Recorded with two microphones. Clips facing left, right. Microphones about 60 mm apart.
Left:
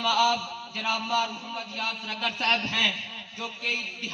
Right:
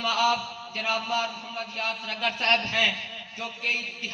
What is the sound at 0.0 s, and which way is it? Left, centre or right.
A man's voice, right.